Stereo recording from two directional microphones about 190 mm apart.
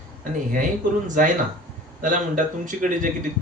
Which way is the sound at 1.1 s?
40° right (ahead or behind).